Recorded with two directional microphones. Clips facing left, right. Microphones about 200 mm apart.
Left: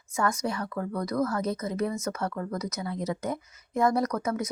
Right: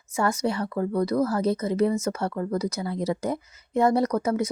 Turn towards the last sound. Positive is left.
turn(degrees=-30)  # may be behind; listen again after turning